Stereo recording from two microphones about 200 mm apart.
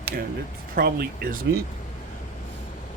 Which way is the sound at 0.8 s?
50° right (ahead or behind).